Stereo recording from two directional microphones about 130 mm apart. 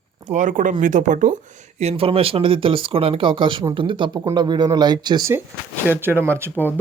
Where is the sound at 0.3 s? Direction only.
75° right (ahead or behind).